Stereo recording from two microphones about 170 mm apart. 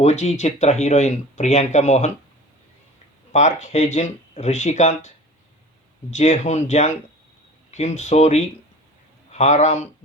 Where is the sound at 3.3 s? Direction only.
45° left (ahead or behind).